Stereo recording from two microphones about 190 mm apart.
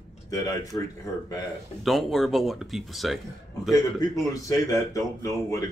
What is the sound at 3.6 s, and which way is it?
A man's voice, 20° left (ahead or behind).